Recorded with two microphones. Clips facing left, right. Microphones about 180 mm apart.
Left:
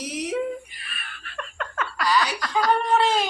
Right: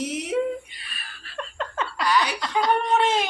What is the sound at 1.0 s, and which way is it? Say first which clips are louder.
Laughter: right 2 dB; 35° right (ahead or behind).